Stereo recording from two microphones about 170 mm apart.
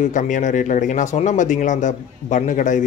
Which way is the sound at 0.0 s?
50° left (ahead or behind).